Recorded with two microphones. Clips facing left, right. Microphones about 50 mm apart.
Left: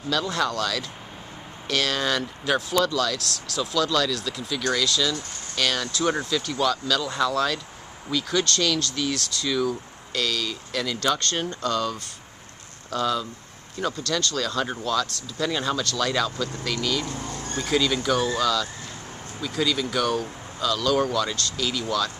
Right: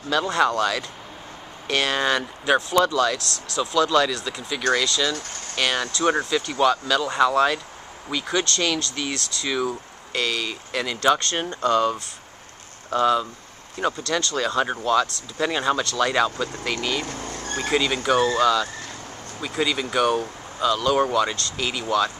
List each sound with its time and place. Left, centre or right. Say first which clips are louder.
0.1 s speech: right 4 dB; right
3.2 s speech: even; left
3.5 s speech: right 4 dB; centre
17.0 s speech: even; right
17.5 s a sound: right 3 dB; right
18.1 s speech: right 7 dB; right